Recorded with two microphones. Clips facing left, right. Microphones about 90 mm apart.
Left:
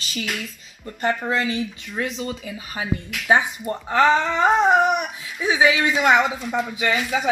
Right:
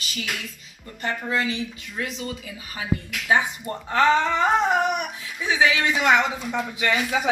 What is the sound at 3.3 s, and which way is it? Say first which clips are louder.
Speech: left 3 dB; 20° left (ahead or behind).